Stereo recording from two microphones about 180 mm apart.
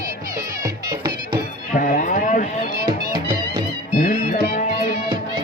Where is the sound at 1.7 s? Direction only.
50° left (ahead or behind).